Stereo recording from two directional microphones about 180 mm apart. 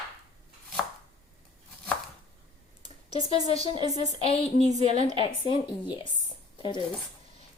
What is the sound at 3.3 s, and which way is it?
A woman's voice, 30° left (ahead or behind).